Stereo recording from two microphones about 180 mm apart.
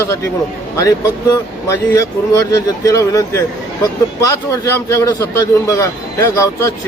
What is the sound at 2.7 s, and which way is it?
A man's voice, 20° left (ahead or behind).